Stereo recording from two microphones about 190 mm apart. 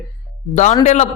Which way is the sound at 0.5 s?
40° left (ahead or behind).